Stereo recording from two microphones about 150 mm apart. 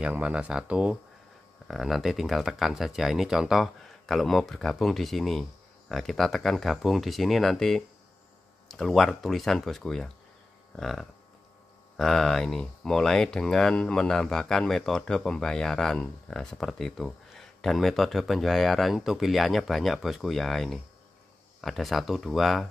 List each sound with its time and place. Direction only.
0.0 s speech: 5° right (ahead or behind)